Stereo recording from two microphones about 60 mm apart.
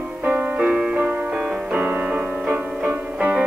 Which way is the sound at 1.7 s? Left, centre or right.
Right.